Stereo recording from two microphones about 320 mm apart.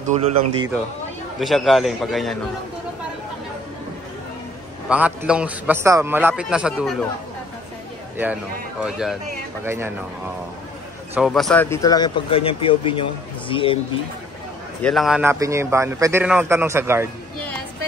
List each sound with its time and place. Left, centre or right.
0.0 s speech: right
1.4 s a man's voice: centre
4.8 s a man's voice: centre
8.8 s a man's voice: centre
11.1 s speech: centre
14.8 s a man's voice: centre